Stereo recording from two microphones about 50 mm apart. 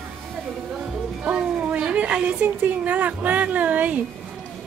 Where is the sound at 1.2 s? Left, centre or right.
Right.